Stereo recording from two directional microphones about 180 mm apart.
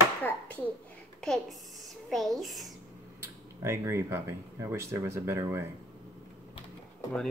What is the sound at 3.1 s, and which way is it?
Speech, 15° right (ahead or behind).